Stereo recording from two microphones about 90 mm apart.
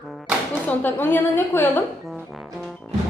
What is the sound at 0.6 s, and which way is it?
A woman's voice, 20° left (ahead or behind).